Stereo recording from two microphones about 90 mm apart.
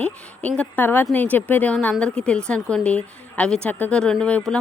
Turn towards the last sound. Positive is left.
turn(degrees=10)  # may be behind; listen again after turning